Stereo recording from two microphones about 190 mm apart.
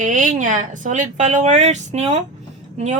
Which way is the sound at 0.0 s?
40° right (ahead or behind).